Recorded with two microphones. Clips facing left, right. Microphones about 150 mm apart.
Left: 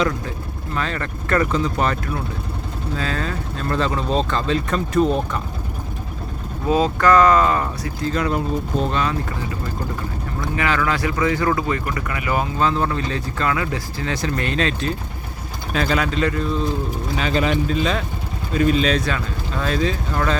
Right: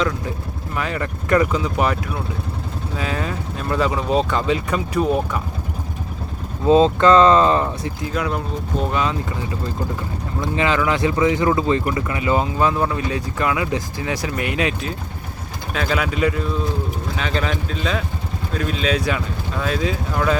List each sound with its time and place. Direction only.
0.8 s speech: 10° right (ahead or behind)
6.7 s speech: 25° right (ahead or behind)
8.0 s speech: 5° right (ahead or behind)
8.9 s speech: 15° right (ahead or behind)
10.5 s speech: 20° right (ahead or behind)
17.2 s speech: 5° left (ahead or behind)